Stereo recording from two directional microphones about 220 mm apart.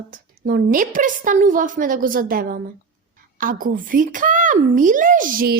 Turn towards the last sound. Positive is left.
turn(degrees=-40)  # may be behind; listen again after turning